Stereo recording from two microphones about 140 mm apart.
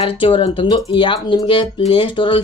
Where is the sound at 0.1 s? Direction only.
40° left (ahead or behind).